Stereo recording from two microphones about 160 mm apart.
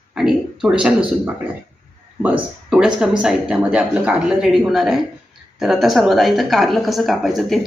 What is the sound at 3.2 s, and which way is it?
Speech, 5° right (ahead or behind).